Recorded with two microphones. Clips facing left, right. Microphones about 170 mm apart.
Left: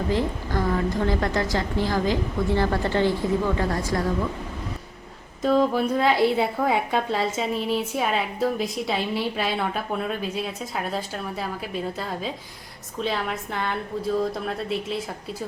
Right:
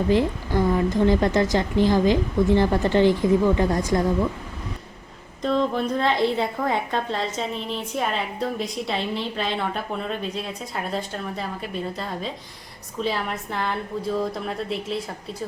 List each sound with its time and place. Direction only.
0.1 s a woman's voice: 15° right (ahead or behind)
5.4 s a woman's voice: 5° left (ahead or behind)